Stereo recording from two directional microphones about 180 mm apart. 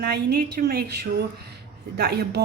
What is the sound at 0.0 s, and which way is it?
Speech, 65° right (ahead or behind).